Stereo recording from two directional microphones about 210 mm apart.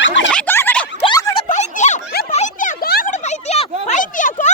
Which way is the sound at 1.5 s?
35° left (ahead or behind).